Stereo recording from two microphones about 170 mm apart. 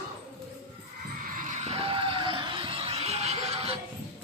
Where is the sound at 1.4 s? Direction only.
45° right (ahead or behind).